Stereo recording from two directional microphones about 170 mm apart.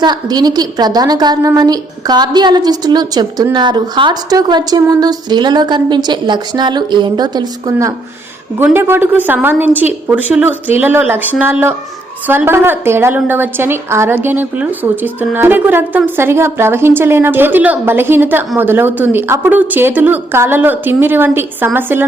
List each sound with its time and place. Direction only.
0.0 s a woman's voice: 25° right (ahead or behind)
12.3 s a woman's voice: 15° right (ahead or behind)